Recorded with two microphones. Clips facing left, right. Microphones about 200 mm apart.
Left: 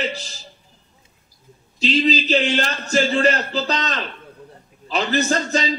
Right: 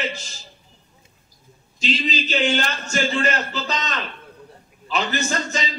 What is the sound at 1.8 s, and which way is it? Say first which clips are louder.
Speech: left 6 dB; 35° left (ahead or behind).